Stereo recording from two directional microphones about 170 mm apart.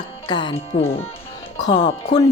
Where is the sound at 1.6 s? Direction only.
30° left (ahead or behind).